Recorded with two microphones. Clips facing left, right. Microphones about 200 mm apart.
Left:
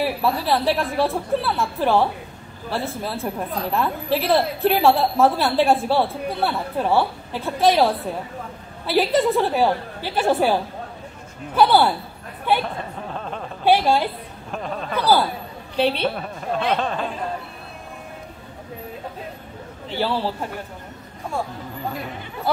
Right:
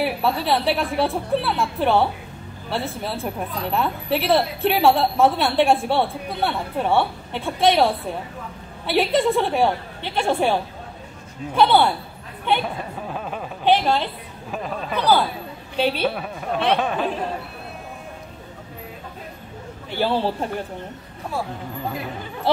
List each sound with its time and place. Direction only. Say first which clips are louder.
0.0 s a woman's voice: even; centre (ahead or behind)
12.6 s a sound: right 1 dB; 10° right (ahead or behind)
13.7 s a man's voice: left 1 dB; 10° left (ahead or behind)
14.5 s a woman's voice: even; 5° right (ahead or behind)
15.0 s a man's voice: even; 10° left (ahead or behind)
15.8 s a woman's voice: left 1 dB; 5° right (ahead or behind)
19.9 s a man's voice: right 2 dB; 15° right (ahead or behind)